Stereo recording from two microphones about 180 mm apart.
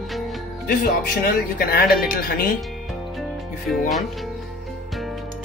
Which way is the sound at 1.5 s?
55° left (ahead or behind).